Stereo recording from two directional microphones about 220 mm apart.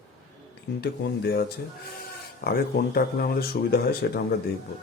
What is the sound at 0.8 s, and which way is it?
Speech, 45° left (ahead or behind).